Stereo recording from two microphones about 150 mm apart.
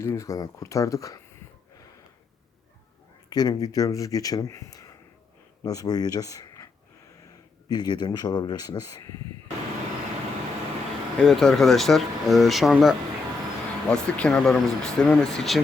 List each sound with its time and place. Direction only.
0.0 s speech: 20° left (ahead or behind)
3.2 s speech: 25° left (ahead or behind)
7.7 s speech: 30° left (ahead or behind)
11.2 s speech: centre (ahead or behind)
13.9 s speech: 5° left (ahead or behind)